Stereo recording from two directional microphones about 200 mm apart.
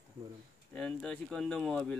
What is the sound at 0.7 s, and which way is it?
Speech, 5° left (ahead or behind).